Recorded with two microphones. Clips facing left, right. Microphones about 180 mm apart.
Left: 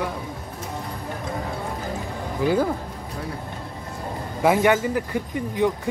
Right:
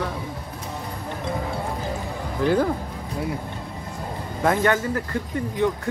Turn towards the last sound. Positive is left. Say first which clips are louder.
# left 1 dB
turn(degrees=15)  # may be behind; listen again after turning